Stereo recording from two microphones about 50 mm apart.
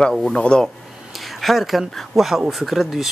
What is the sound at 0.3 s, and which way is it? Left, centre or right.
Speech, centre.